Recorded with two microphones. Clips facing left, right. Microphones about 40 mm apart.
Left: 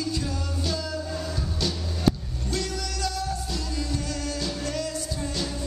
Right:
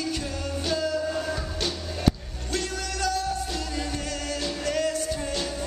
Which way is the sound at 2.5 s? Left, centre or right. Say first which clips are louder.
Right 1 dB; right.